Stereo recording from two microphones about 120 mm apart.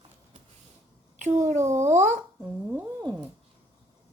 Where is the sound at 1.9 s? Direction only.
85° right.